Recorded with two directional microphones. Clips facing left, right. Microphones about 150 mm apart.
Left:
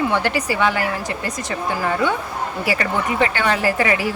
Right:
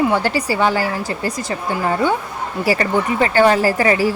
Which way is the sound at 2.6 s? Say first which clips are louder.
Right 5 dB; 35° right (ahead or behind).